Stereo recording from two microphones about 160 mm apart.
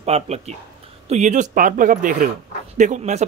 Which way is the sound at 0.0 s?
40° right (ahead or behind).